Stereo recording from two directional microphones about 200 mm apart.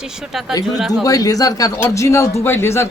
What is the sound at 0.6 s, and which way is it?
Speech, centre (ahead or behind).